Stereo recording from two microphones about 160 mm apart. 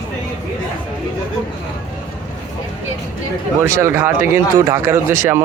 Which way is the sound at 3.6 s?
15° right (ahead or behind).